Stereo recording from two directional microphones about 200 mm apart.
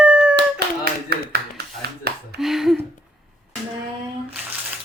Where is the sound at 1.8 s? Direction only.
50° right (ahead or behind).